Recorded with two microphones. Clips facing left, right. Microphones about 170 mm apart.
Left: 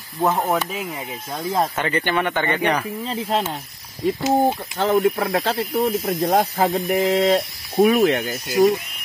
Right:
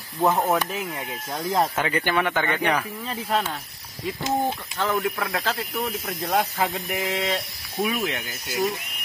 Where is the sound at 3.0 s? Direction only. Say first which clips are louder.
Left 3 dB; 25° left (ahead or behind).